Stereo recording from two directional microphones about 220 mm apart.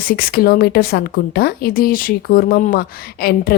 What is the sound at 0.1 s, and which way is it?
A woman's voice, 45° left (ahead or behind).